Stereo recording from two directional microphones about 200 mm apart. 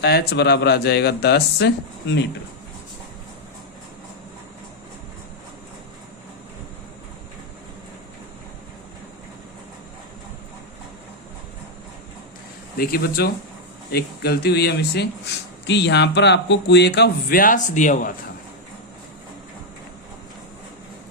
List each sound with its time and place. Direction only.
0.0 s speech: 55° left (ahead or behind)
12.7 s speech: 50° left (ahead or behind)